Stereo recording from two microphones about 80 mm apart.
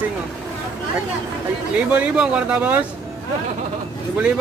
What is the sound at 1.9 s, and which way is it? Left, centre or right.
Speech, centre.